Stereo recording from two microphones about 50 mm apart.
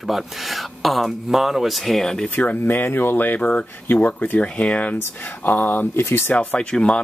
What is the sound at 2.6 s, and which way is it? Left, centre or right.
Speech, left.